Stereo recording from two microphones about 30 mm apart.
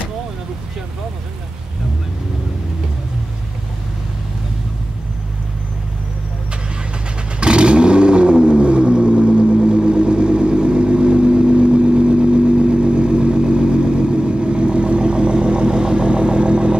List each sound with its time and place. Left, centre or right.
7.3 s vehicle: right